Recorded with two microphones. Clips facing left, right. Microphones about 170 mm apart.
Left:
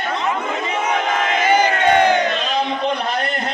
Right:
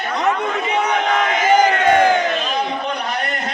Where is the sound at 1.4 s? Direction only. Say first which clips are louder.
Right 2 dB; 45° right (ahead or behind).